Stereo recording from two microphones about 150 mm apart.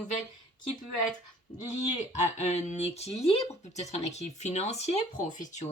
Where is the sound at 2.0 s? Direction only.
50° left (ahead or behind).